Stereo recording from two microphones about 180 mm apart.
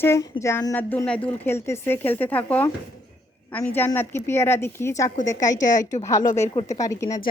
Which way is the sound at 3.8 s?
10° left (ahead or behind).